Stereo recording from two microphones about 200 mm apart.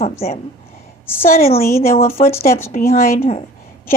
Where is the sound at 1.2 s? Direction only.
45° left (ahead or behind).